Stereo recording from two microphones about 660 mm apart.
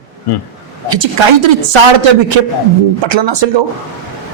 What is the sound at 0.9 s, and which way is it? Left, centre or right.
Speech, right.